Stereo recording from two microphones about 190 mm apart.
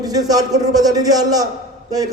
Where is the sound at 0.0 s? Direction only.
20° right (ahead or behind).